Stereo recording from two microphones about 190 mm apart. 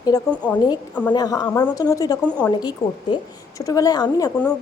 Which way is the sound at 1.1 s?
20° left (ahead or behind).